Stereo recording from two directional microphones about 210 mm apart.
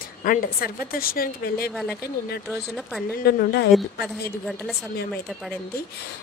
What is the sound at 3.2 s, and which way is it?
Speech, 50° left (ahead or behind).